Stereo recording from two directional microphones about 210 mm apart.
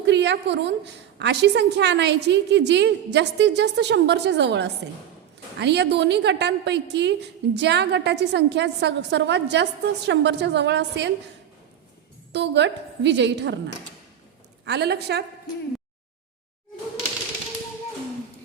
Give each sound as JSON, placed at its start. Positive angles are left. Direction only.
{"t": 0.0, "sound": "a sound", "side_deg": -55}
{"t": 1.2, "sound": "a woman's voice", "side_deg": -55}
{"t": 12.3, "sound": "a woman's voice", "side_deg": -55}
{"t": 14.6, "sound": "a woman's voice", "side_deg": -50}